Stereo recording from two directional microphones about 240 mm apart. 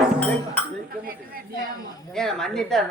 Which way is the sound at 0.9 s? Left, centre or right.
Right.